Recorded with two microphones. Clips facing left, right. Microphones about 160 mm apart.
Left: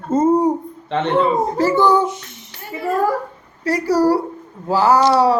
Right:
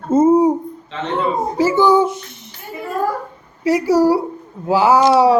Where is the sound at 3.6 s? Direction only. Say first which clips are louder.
Right 2 dB; 20° right (ahead or behind).